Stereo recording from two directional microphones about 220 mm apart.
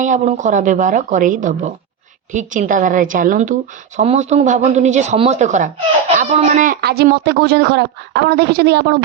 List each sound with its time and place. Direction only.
0.0 s a woman's voice: 35° right (ahead or behind); by 9.0 s 50° right (ahead or behind)